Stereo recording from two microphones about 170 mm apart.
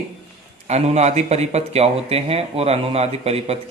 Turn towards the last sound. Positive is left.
turn(degrees=-40)  # may be behind; listen again after turning